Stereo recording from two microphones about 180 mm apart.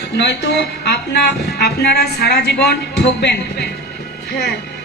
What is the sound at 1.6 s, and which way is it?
A man's voice, 65° left (ahead or behind).